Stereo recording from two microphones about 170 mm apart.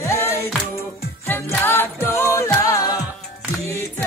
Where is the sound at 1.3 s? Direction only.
15° left (ahead or behind).